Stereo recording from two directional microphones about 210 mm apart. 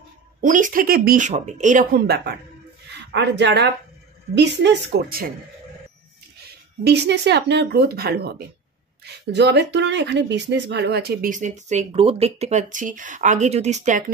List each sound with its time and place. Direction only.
0.4 s speech: 40° right (ahead or behind)
2.9 s speech: 55° right (ahead or behind)
6.8 s speech: 55° right (ahead or behind); by 14.1 s 35° right (ahead or behind)